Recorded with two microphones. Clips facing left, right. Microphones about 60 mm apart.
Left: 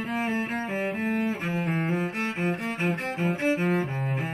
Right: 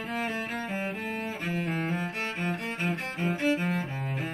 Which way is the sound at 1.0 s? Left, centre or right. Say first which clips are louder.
Left 6 dB; left.